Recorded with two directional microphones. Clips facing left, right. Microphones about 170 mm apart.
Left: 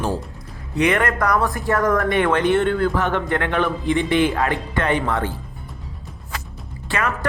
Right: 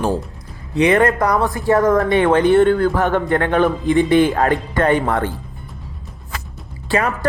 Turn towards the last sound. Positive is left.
turn(degrees=-35)  # may be behind; listen again after turning